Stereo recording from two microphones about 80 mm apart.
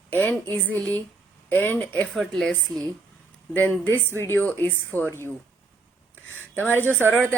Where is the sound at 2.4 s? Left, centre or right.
Centre.